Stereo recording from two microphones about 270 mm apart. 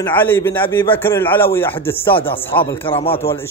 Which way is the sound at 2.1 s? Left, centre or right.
Centre.